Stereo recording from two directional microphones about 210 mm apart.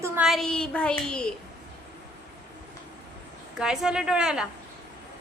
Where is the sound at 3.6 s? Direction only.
5° right (ahead or behind).